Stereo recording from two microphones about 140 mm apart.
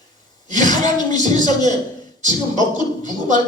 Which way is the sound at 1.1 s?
60° right (ahead or behind).